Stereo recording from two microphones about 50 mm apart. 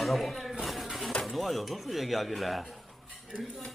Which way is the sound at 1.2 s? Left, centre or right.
Centre.